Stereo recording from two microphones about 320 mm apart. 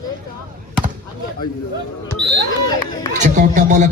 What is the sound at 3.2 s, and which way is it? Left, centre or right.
Speech, right.